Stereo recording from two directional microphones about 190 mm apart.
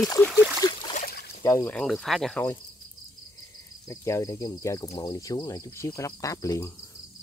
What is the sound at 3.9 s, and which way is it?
Speech, 15° left (ahead or behind).